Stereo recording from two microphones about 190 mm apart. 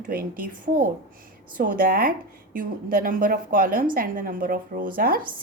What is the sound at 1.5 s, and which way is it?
A woman's voice, 45° right (ahead or behind).